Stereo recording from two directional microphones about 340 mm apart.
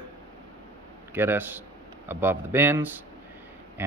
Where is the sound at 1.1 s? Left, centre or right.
Centre.